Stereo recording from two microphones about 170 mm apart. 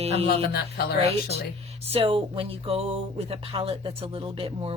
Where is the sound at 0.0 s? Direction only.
35° right (ahead or behind).